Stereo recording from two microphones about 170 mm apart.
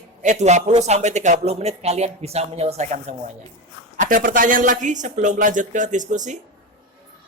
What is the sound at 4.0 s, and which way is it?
A man's voice, 55° right (ahead or behind).